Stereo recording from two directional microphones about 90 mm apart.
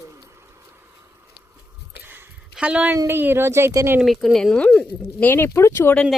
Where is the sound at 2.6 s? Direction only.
15° right (ahead or behind).